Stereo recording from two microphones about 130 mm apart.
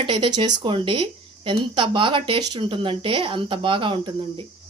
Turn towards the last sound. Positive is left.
turn(degrees=-40)  # may be behind; listen again after turning